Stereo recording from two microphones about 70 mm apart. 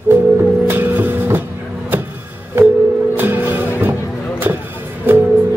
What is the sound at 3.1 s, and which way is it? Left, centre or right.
Music, right.